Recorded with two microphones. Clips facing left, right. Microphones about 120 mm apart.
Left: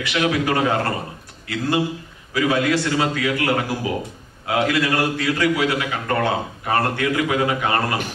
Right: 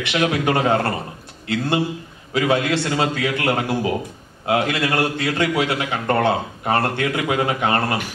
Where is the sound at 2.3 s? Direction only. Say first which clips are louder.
Even; 25° right (ahead or behind).